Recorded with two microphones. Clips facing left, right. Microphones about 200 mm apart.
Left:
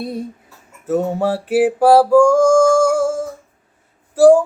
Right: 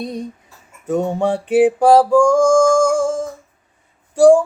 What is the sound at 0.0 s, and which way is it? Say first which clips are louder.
Female singing: left 1 dB; 5° left (ahead or behind).